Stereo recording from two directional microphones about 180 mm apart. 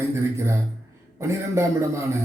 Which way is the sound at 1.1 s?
15° right (ahead or behind).